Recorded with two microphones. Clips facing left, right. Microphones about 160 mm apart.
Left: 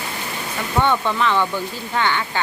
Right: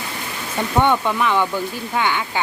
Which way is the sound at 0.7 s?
10° right (ahead or behind).